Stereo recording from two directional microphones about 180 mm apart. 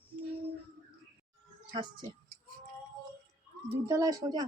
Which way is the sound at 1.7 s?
25° right (ahead or behind).